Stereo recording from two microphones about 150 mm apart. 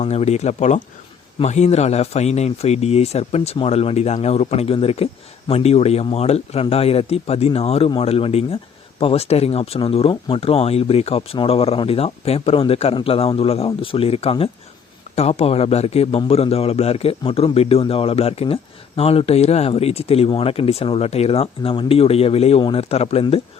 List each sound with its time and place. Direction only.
0.0 s a man's voice: 45° left (ahead or behind)